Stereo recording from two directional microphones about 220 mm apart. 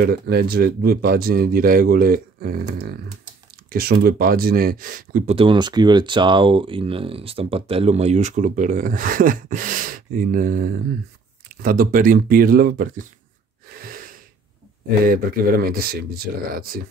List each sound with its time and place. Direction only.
0.0 s speech: 45° right (ahead or behind)
13.7 s gasp: 45° right (ahead or behind)
15.0 s speech: 40° right (ahead or behind)